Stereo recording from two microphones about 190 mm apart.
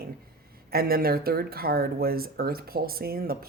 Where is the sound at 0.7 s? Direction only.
50° right (ahead or behind).